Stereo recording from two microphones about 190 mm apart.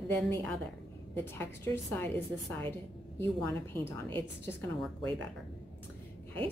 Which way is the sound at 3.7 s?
10° left (ahead or behind).